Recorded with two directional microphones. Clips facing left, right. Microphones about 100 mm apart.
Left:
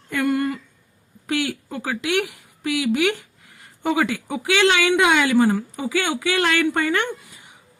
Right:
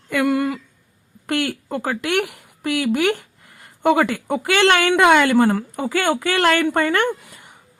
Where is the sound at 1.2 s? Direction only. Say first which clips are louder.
Right 2 dB; 55° right (ahead or behind).